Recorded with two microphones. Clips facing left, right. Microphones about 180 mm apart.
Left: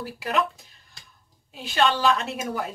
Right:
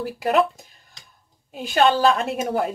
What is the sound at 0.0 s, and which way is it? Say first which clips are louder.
A woman's voice: right 6 dB; 50° right (ahead or behind).